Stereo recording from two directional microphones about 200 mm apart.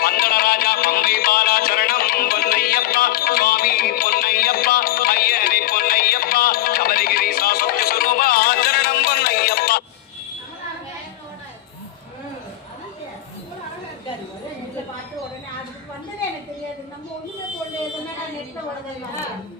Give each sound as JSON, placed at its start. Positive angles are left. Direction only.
{"t": 0.0, "sound": "music", "side_deg": 50}